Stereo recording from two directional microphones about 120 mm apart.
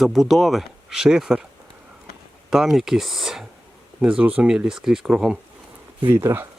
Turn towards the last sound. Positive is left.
turn(degrees=-20)  # may be behind; listen again after turning